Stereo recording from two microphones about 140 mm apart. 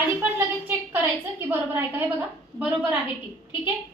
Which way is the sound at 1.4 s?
15° right (ahead or behind).